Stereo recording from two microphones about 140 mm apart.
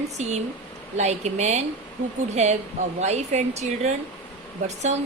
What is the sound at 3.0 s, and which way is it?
Speech, 55° right (ahead or behind).